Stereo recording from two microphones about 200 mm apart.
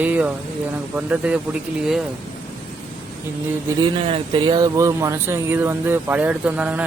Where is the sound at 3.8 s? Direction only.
25° right (ahead or behind).